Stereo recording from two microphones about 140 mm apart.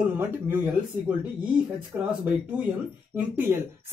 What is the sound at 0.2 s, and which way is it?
Speech, 15° right (ahead or behind).